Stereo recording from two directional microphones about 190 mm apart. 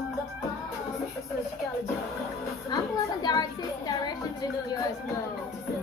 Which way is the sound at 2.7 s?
20° left (ahead or behind).